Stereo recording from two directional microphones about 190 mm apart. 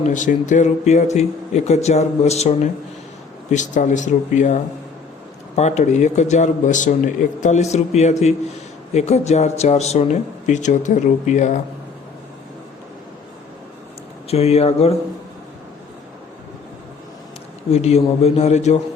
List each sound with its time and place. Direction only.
0.0 s a man's voice: 40° left (ahead or behind)
14.3 s a man's voice: 35° left (ahead or behind)
17.7 s a man's voice: 35° left (ahead or behind)